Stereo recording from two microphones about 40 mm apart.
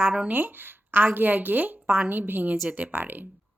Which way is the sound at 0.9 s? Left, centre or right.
Right.